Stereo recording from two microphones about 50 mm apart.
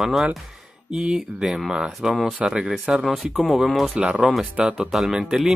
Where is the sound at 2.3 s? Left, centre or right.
Centre.